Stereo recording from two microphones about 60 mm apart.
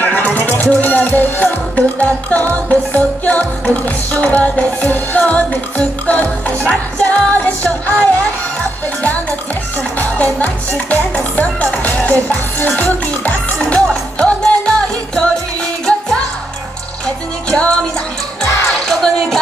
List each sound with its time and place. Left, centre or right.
0.0 s music: left
9.9 s speech: left
14.1 s music: centre
18.9 s music: centre